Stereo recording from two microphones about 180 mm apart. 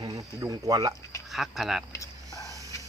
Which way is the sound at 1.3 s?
Centre (ahead or behind).